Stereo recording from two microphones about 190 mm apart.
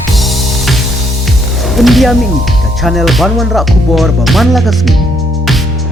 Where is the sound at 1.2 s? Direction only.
Centre (ahead or behind).